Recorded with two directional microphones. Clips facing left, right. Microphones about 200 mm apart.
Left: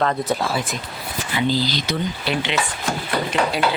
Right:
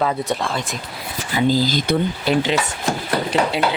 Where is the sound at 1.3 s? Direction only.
45° right (ahead or behind).